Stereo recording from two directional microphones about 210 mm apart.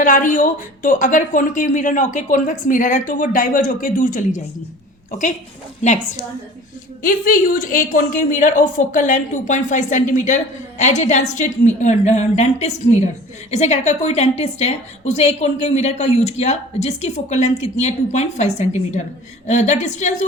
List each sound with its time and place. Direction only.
0.0 s a woman's voice: 40° left (ahead or behind)
5.8 s a woman's voice: 35° left (ahead or behind)